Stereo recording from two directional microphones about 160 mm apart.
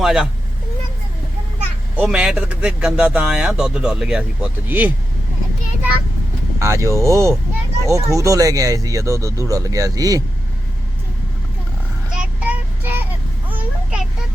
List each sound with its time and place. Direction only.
0.0 s speech: 5° right (ahead or behind)
2.0 s speech: 5° right (ahead or behind)
6.6 s speech: 15° right (ahead or behind)
12.1 s child singing: 5° right (ahead or behind)
13.5 s a sound: 5° right (ahead or behind)